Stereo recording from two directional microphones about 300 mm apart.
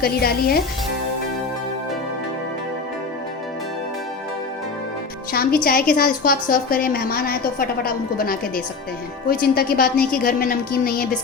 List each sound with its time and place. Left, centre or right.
0.0 s speech: left
5.3 s music: left
5.6 s a woman's voice: left